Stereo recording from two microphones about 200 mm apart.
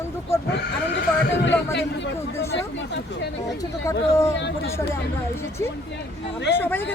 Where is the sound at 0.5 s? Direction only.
60° left (ahead or behind).